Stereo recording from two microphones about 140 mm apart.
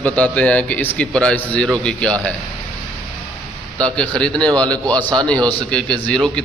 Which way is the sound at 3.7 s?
5° left (ahead or behind).